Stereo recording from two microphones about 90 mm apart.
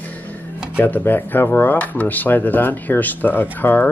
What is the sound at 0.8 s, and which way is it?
Speech, 20° left (ahead or behind).